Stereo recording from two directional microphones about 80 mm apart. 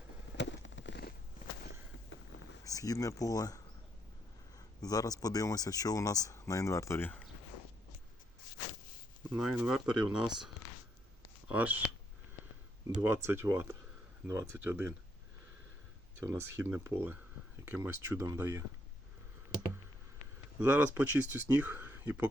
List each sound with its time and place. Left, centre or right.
2.6 s speech: left
4.8 s speech: left
7.0 s speech: left
9.4 s speech: centre
11.4 s speech: right
13.0 s speech: right
16.2 s speech: right
20.6 s speech: right
21.7 s a sound: right